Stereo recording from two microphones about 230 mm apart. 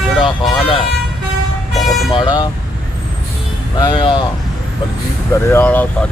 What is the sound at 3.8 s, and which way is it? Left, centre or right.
Speech, centre.